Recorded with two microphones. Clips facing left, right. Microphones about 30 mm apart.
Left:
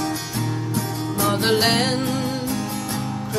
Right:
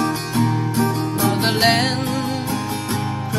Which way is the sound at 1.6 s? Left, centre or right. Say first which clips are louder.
Right 3 dB; centre.